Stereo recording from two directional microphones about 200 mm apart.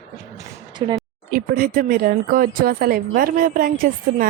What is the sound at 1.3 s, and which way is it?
Speech, 45° right (ahead or behind).